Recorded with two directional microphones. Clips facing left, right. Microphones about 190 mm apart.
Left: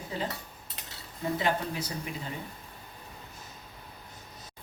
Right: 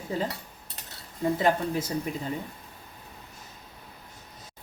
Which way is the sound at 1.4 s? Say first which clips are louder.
Right 4 dB; 45° right (ahead or behind).